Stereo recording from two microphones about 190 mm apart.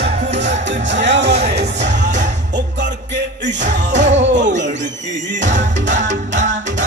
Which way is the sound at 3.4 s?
70° right (ahead or behind).